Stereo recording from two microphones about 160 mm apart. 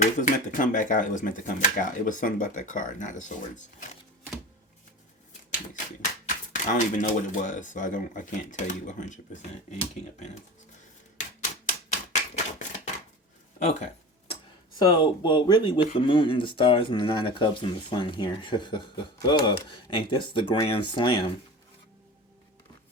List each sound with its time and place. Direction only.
0.0 s speech: 50° left (ahead or behind)
6.2 s speech: 50° left (ahead or behind)
11.9 s typewriter: 50° left (ahead or behind)
13.6 s speech: 45° left (ahead or behind)
14.8 s speech: 25° left (ahead or behind)